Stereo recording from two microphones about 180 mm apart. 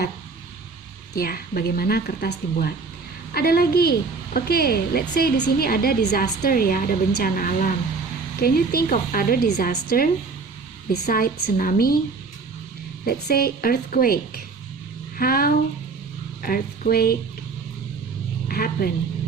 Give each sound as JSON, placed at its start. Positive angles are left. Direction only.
{"t": 1.1, "sound": "a woman's voice", "side_deg": 55}
{"t": 13.1, "sound": "speech", "side_deg": 55}
{"t": 18.4, "sound": "a sound", "side_deg": 55}